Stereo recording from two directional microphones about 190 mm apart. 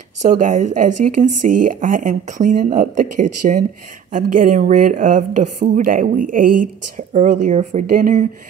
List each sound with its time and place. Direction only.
0.2 s speech: 40° right (ahead or behind)